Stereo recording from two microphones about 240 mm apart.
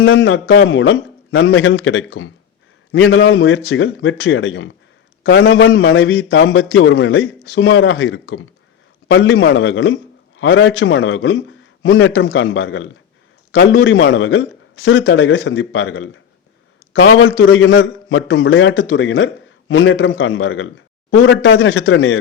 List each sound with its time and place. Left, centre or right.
0.0 s a man's voice: left